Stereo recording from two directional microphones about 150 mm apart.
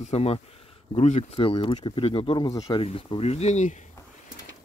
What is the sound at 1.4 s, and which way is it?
Speech, 35° left (ahead or behind).